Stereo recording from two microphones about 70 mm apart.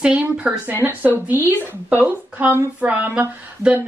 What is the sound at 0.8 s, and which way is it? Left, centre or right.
Speech, right.